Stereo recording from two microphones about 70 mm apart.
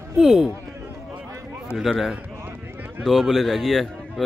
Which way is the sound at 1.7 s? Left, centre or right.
Centre.